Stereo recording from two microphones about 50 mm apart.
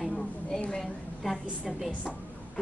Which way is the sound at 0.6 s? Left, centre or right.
Centre.